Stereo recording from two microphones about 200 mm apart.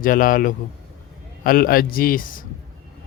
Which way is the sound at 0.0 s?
45° left (ahead or behind).